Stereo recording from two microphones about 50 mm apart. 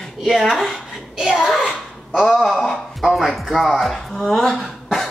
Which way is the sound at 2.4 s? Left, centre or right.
Centre.